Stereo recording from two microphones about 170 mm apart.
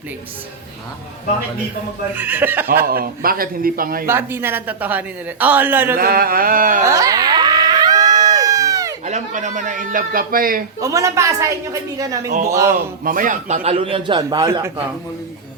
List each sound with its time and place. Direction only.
2.1 s speech: 10° right (ahead or behind)
2.9 s a man's voice: 60° right (ahead or behind)
4.0 s speech: 15° right (ahead or behind)
6.0 s a man's voice: 60° right (ahead or behind)
6.8 s a sound: 20° right (ahead or behind)
9.0 s a man's voice: 45° right (ahead or behind)
10.8 s a woman's voice: 20° right (ahead or behind)
13.1 s a man's voice: 50° right (ahead or behind); by 14.7 s 20° right (ahead or behind)